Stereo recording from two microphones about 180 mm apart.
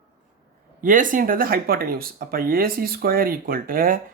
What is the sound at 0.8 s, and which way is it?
Speech, 45° right (ahead or behind).